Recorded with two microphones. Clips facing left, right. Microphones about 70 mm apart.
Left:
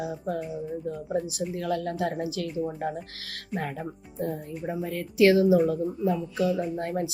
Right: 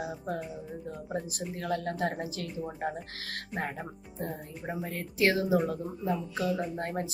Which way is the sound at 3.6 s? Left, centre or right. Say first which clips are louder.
Left 4 dB; right.